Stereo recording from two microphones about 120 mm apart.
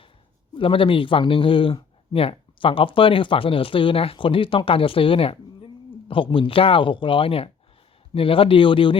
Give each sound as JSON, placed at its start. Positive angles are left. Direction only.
{"t": 0.5, "sound": "speech", "side_deg": 45}